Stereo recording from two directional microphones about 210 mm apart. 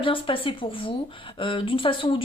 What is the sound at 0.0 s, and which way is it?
Speech, 25° left (ahead or behind).